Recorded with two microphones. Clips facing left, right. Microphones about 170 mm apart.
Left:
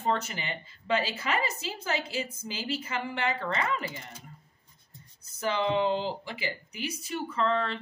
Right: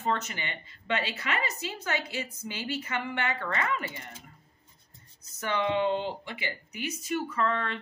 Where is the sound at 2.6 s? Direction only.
30° left (ahead or behind).